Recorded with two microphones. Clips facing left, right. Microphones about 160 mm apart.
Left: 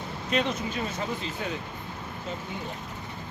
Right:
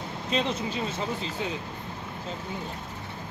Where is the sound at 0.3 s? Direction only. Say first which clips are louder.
Even; 30° right (ahead or behind).